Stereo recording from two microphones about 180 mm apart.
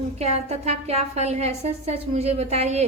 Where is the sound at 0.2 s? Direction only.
35° right (ahead or behind).